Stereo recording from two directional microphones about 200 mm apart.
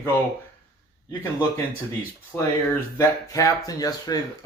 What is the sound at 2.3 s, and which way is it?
Speech, 10° left (ahead or behind).